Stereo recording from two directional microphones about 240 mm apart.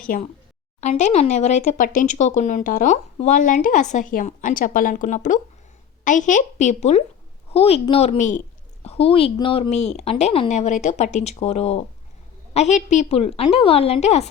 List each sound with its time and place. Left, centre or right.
0.1 s speech: left